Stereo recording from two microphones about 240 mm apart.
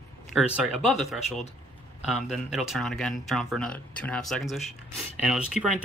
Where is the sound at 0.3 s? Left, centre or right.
Centre.